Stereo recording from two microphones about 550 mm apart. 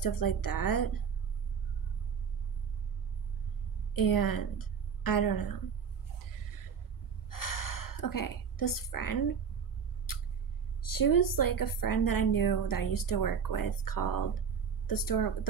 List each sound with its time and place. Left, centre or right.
0.0 s a woman's voice: left
3.9 s a woman's voice: left
7.2 s a sound: left
10.8 s a woman's voice: left